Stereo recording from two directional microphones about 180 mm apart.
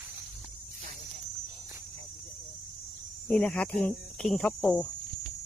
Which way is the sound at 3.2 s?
5° left (ahead or behind).